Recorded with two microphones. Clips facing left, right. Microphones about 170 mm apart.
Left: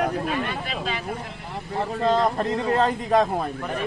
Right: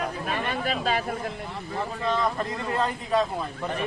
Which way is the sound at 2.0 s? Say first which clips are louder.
Left 5 dB; 40° left (ahead or behind).